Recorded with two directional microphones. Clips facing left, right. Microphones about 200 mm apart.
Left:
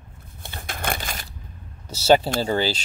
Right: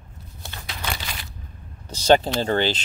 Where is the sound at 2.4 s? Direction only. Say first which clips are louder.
Right 1 dB; 10° left (ahead or behind).